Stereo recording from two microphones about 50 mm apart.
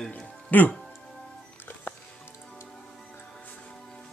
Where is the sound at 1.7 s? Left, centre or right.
Left.